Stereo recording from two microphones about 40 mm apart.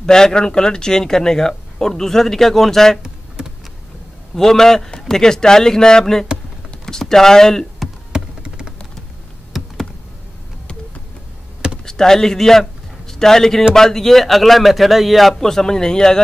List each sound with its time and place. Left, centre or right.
0.0 s speech: centre
3.0 s typing: centre
4.4 s speech: centre
8.1 s a sound: right
9.5 s computer keyboard: centre
11.8 s speech: centre